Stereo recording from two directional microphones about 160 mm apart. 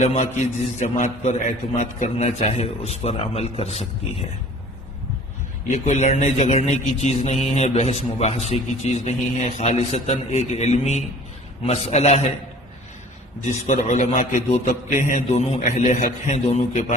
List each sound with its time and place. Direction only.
0.0 s a man's voice: 45° left (ahead or behind)
5.6 s a man's voice: 50° left (ahead or behind)
13.4 s a man's voice: 50° left (ahead or behind)